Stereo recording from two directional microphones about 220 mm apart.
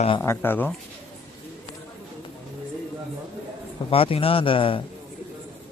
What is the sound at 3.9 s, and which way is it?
Speech, 25° left (ahead or behind).